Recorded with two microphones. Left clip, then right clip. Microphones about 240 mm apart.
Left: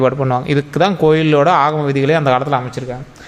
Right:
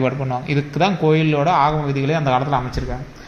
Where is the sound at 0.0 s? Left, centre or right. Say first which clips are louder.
Left 7 dB; left.